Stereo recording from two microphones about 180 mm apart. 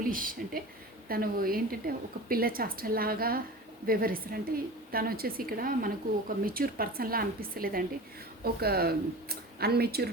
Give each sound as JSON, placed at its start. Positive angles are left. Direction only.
{"t": 0.1, "sound": "a woman's voice", "side_deg": -50}